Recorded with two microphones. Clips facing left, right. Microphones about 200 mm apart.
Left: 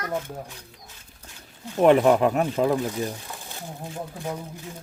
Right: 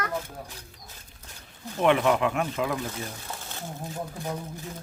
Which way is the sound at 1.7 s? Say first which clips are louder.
Left 5 dB; 40° left (ahead or behind).